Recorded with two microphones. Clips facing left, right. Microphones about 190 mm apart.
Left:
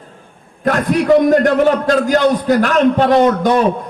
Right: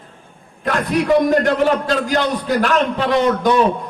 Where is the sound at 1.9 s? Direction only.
45° left (ahead or behind).